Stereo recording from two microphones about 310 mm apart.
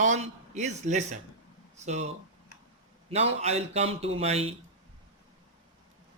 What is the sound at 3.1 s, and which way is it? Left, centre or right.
Speech, centre.